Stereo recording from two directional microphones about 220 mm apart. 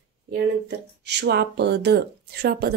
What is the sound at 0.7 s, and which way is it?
Speech, 50° right (ahead or behind).